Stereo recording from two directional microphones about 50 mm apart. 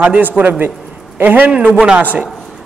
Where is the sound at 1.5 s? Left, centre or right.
Right.